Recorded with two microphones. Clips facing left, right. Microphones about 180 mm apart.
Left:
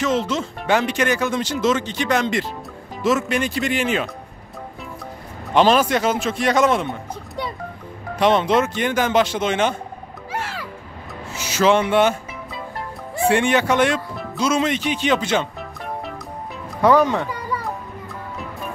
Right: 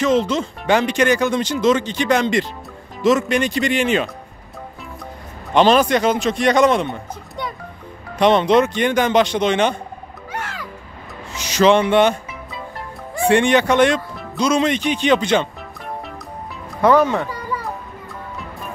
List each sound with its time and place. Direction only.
0.0 s speech: centre (ahead or behind)
5.5 s speech: 5° left (ahead or behind)
8.2 s speech: 5° left (ahead or behind)
10.3 s music: 30° left (ahead or behind)
11.3 s speech: 5° left (ahead or behind)
16.9 s speech: 15° left (ahead or behind)